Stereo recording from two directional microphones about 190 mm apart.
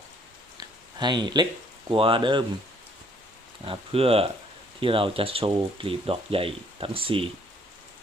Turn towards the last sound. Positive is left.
turn(degrees=-30)  # may be behind; listen again after turning